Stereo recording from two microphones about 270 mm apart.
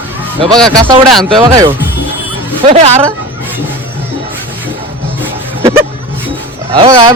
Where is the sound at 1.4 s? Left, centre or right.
Centre.